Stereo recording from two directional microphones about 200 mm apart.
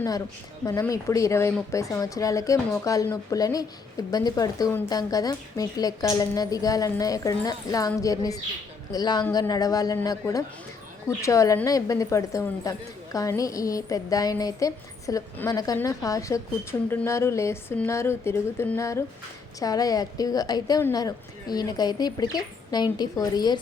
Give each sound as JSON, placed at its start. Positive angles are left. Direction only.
{"t": 0.6, "sound": "a woman's voice", "side_deg": 15}